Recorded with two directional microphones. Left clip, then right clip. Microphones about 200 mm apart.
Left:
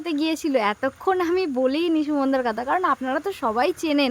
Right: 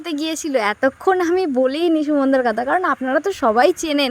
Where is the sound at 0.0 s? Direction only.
25° right (ahead or behind).